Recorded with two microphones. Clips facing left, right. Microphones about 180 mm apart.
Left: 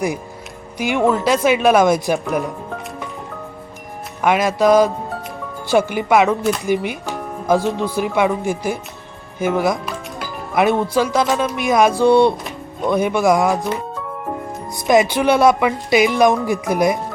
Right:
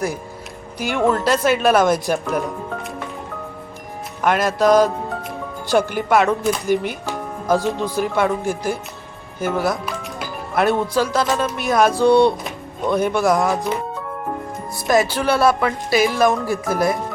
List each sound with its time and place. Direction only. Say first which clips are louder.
0.8 s speech: left 2 dB; 15° left (ahead or behind)
2.1 s speech: left 1 dB; centre (ahead or behind)
4.2 s speech: left 2 dB; 10° left (ahead or behind)
7.9 s speech: left 1 dB; 10° left (ahead or behind)
13.7 s speech: even; centre (ahead or behind)
14.8 s speech: left 3 dB; 20° left (ahead or behind)